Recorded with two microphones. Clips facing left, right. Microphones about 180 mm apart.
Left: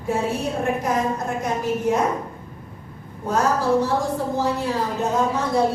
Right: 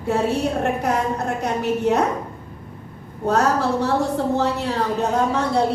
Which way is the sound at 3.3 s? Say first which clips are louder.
Right 1 dB; 70° right (ahead or behind).